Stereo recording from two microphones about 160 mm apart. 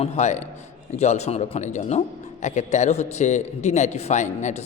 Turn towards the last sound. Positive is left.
turn(degrees=45)  # may be behind; listen again after turning